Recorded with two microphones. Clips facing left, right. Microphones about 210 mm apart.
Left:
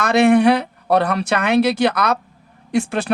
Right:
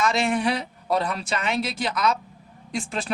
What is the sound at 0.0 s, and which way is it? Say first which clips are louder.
Speech: left 10 dB; 65° left (ahead or behind).